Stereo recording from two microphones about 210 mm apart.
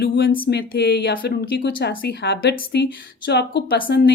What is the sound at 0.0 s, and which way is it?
Speech, 55° left (ahead or behind).